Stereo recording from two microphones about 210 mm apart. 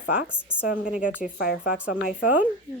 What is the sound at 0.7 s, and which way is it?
Speech, 40° left (ahead or behind).